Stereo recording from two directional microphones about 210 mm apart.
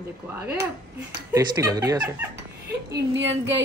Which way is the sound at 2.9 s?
60° right (ahead or behind).